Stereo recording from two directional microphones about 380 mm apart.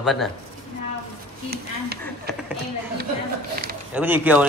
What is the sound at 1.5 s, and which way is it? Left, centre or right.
Speech, right.